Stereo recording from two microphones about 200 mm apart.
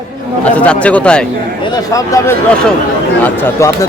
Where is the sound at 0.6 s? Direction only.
5° left (ahead or behind).